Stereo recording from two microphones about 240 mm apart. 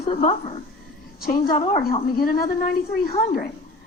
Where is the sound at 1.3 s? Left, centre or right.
Left.